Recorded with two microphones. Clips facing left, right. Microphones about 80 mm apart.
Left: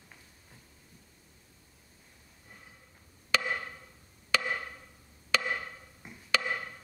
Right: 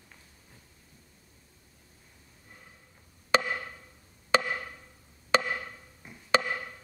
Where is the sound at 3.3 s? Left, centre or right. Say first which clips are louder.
Right 4 dB; right.